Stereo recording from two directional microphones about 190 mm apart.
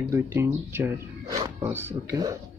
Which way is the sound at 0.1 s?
15° right (ahead or behind).